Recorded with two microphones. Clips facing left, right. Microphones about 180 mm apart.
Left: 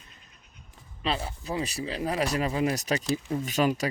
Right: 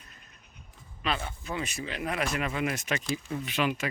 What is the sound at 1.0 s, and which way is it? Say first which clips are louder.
Speech: left 2 dB; 30° left (ahead or behind).